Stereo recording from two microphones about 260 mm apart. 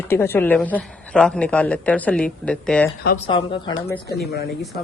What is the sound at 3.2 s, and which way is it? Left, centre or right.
Speech, centre.